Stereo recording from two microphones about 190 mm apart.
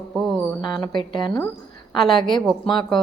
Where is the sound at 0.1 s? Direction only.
Centre (ahead or behind).